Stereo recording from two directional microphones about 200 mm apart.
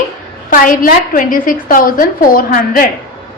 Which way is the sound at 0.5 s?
45° left (ahead or behind).